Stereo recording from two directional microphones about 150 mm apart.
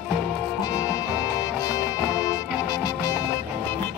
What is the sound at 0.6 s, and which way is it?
Music, 25° left (ahead or behind).